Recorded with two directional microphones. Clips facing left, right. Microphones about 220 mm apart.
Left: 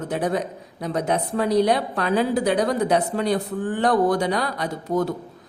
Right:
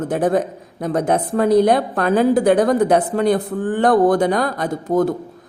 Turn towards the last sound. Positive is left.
turn(degrees=-50)  # may be behind; listen again after turning